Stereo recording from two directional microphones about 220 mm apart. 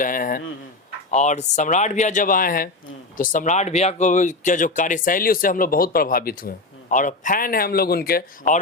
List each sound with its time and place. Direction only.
0.0 s speech: 40° left (ahead or behind)